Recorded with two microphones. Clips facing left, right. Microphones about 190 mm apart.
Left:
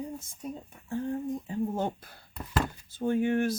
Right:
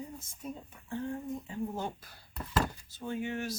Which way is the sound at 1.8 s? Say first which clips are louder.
Left 6 dB; 55° left (ahead or behind).